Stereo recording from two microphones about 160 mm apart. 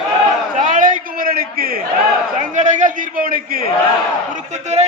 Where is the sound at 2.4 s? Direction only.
50° right (ahead or behind).